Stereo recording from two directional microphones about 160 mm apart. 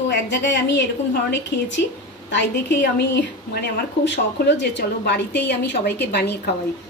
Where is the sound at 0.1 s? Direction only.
90° left.